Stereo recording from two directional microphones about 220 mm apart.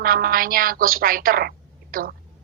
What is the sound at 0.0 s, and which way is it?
A woman's voice, 40° right (ahead or behind).